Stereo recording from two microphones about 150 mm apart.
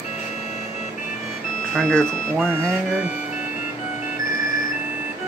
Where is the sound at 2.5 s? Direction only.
20° right (ahead or behind).